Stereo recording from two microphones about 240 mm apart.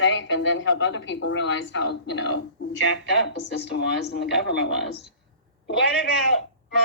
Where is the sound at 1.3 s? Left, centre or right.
Left.